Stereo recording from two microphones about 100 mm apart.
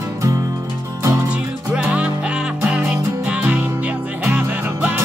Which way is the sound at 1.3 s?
15° right (ahead or behind).